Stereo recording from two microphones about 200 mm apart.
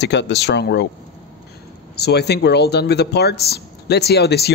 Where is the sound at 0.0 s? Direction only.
60° left (ahead or behind).